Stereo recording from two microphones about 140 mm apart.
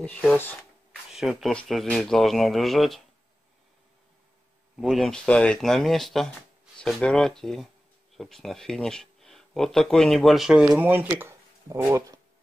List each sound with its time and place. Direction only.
0.3 s speech: 10° left (ahead or behind)
1.1 s speech: centre (ahead or behind)
4.7 s speech: 5° right (ahead or behind); by 12.2 s 20° right (ahead or behind)